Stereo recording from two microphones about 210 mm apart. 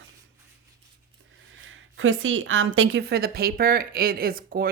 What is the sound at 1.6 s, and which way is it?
A woman's voice, 65° right (ahead or behind).